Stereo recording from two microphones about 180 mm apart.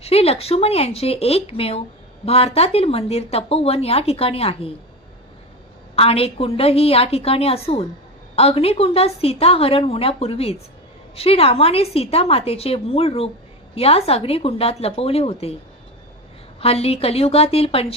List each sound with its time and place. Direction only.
0.0 s speech: 35° left (ahead or behind)
6.0 s speech: 35° left (ahead or behind)
16.6 s speech: 35° left (ahead or behind)